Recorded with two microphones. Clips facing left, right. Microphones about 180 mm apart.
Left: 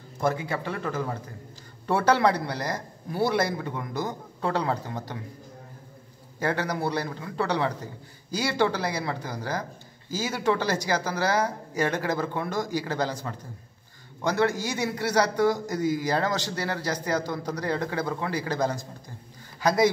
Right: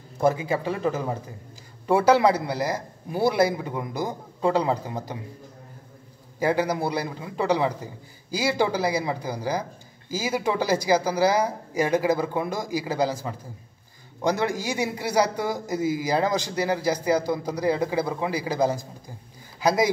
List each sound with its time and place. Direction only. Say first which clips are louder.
0.2 s a man's voice: right 4 dB; 15° right (ahead or behind)
6.4 s a man's voice: right 4 dB; 10° right (ahead or behind)